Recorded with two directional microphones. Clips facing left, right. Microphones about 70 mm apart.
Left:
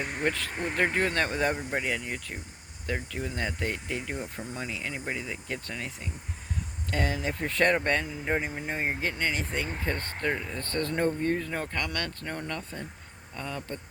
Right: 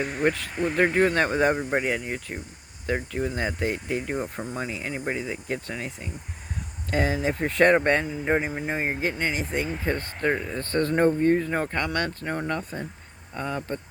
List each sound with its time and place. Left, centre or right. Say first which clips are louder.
0.0 s speech: right 6 dB; centre
0.8 s speech: right 5 dB; centre
4.0 s speech: right 6 dB; right
4.5 s speech: right 3 dB; right
6.9 s speech: right 5 dB; centre
8.7 s speech: right 3 dB; centre
10.2 s speech: right 5 dB; right